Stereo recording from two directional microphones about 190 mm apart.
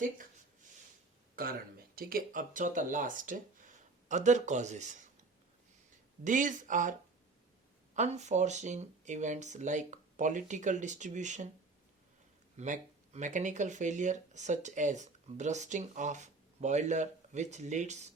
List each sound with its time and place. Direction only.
1.4 s speech: 50° right (ahead or behind)
6.2 s speech: 40° right (ahead or behind)
7.9 s speech: 35° right (ahead or behind)
12.5 s speech: 40° right (ahead or behind)